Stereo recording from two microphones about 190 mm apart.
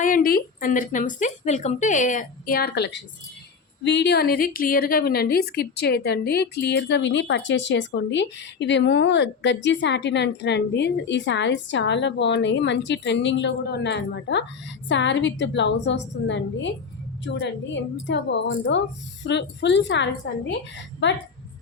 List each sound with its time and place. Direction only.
0.0 s a woman's voice: 45° left (ahead or behind); by 21.2 s 70° left (ahead or behind)